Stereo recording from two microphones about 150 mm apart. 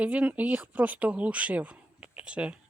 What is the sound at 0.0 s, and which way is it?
Speech, 10° right (ahead or behind).